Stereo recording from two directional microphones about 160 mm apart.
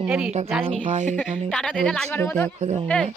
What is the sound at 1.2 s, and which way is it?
Speech, 5° left (ahead or behind).